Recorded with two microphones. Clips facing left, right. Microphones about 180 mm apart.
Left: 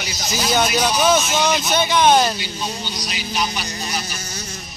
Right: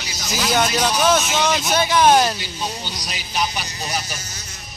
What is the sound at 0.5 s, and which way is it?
Speech, centre (ahead or behind).